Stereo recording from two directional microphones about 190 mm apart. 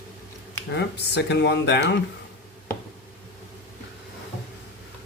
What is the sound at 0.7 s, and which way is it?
Speech, 65° left (ahead or behind).